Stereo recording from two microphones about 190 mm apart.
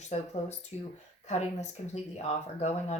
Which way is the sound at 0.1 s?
35° left (ahead or behind).